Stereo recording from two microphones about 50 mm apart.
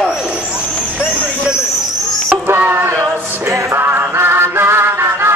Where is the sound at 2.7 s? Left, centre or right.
Right.